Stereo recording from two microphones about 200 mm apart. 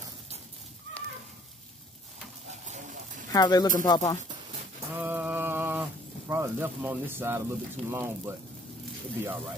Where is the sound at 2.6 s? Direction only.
40° right (ahead or behind).